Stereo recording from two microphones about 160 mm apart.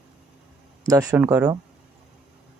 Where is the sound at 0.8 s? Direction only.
20° right (ahead or behind).